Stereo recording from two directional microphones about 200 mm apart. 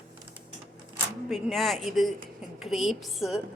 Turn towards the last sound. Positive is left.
turn(degrees=0)  # may be behind; listen again after turning